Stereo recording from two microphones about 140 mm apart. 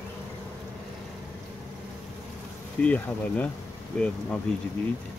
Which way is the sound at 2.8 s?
10° left (ahead or behind).